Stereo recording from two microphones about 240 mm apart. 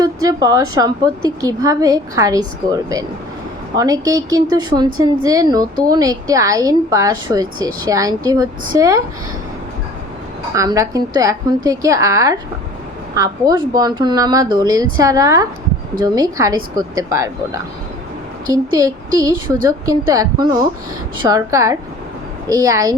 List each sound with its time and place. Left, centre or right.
0.0 s a woman's voice: centre
3.8 s a woman's voice: centre
10.5 s a woman's voice: centre